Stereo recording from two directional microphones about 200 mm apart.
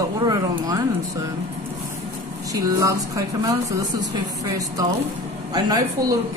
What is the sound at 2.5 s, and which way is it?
Speech, 15° right (ahead or behind).